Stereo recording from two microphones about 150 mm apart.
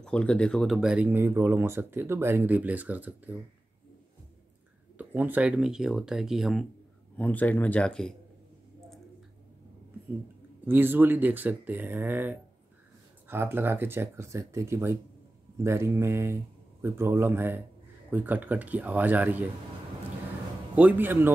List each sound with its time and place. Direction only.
0.0 s speech: 5° left (ahead or behind); by 3.3 s 10° right (ahead or behind)
4.9 s speech: 10° right (ahead or behind)
7.2 s speech: 10° left (ahead or behind)
10.6 s speech: 15° right (ahead or behind)
20.7 s speech: 10° right (ahead or behind)